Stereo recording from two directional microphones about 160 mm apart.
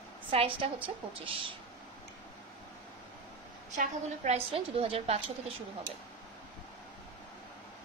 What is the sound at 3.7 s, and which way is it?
A woman's voice, 50° right (ahead or behind).